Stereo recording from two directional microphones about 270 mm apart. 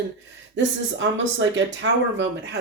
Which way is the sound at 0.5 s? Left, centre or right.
Right.